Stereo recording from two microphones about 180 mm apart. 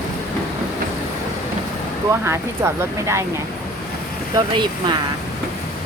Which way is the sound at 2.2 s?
15° right (ahead or behind).